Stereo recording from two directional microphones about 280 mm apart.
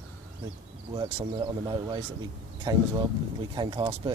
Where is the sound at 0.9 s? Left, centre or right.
Centre.